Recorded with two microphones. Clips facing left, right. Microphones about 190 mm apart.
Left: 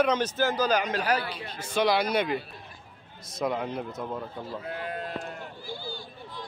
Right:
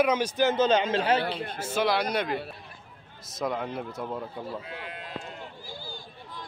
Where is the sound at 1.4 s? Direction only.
55° right (ahead or behind).